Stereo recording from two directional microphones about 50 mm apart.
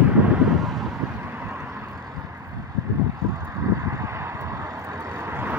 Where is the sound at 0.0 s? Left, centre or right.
Right.